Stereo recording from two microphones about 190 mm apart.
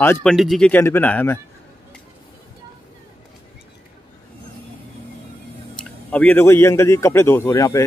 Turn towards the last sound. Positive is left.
turn(degrees=15)  # may be behind; listen again after turning